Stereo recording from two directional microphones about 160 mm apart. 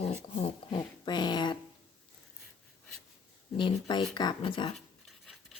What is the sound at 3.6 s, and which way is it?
Speech, 30° left (ahead or behind).